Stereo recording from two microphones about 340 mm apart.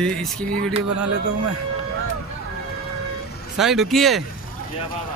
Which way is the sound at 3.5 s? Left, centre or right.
Centre.